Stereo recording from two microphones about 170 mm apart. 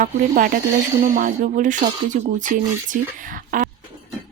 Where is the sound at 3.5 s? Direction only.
50° right (ahead or behind).